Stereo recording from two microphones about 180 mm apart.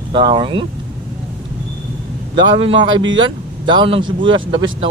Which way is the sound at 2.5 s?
30° right (ahead or behind).